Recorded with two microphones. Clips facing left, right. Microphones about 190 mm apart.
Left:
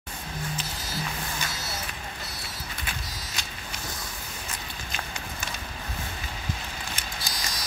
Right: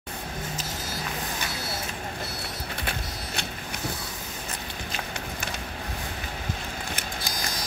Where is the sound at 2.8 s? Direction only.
60° right (ahead or behind).